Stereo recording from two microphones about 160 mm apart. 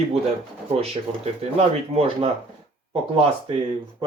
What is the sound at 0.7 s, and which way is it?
Speech, 40° right (ahead or behind).